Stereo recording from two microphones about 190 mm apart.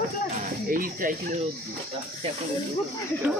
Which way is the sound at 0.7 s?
45° right (ahead or behind).